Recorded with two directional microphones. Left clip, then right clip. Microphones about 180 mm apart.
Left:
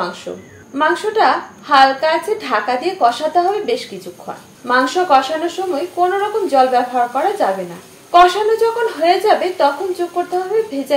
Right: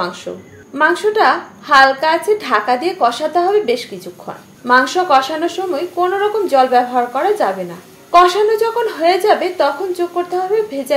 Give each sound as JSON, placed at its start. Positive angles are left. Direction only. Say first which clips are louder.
{"t": 0.7, "sound": "a woman's voice", "louder": "right 2 dB", "side_deg": -40}